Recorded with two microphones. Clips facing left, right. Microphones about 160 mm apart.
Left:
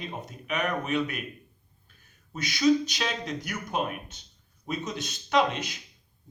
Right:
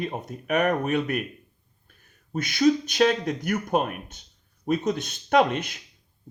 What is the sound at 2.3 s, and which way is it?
Speech, 55° right (ahead or behind).